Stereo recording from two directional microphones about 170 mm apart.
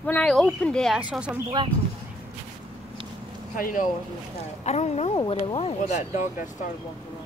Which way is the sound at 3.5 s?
55° left (ahead or behind).